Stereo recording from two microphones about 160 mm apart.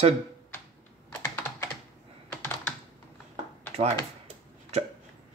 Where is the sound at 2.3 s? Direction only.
15° left (ahead or behind).